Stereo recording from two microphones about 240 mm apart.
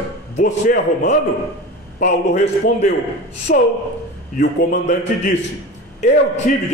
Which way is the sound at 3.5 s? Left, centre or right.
Left.